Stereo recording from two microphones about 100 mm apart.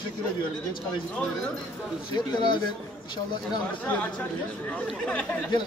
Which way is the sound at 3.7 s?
15° left (ahead or behind).